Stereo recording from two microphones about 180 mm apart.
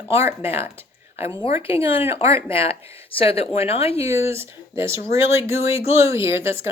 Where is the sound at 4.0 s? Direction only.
15° right (ahead or behind).